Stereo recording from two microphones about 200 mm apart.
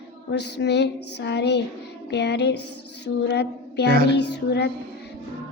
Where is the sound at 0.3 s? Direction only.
60° left (ahead or behind).